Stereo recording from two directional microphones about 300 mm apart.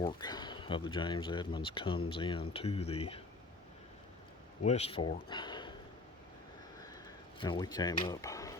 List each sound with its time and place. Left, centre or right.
0.0 s speech: centre
4.6 s speech: left
7.3 s speech: centre